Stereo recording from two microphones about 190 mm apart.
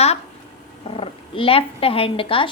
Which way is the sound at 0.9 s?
30° left (ahead or behind).